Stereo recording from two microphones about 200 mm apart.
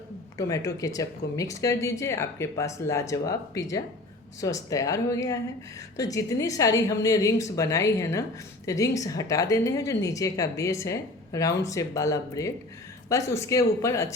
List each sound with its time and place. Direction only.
0.3 s speech: 15° left (ahead or behind)